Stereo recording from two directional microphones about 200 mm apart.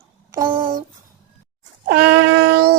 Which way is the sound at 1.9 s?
50° right (ahead or behind).